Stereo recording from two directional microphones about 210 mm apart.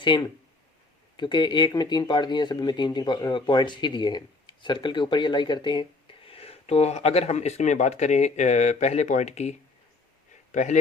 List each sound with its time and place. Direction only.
0.0 s a man's voice: 20° left (ahead or behind)